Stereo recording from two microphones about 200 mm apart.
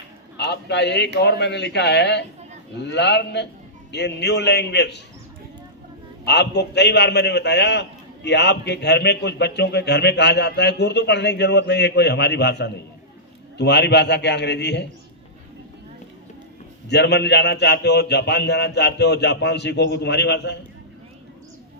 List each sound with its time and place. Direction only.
0.3 s a man's voice: 55° left (ahead or behind)
6.2 s a man's voice: 60° left (ahead or behind)
16.9 s a man's voice: 55° left (ahead or behind)